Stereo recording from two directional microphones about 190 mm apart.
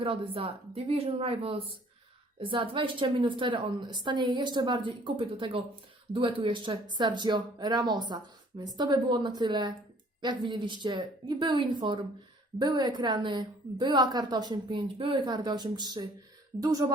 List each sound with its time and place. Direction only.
0.0 s speech: 30° right (ahead or behind)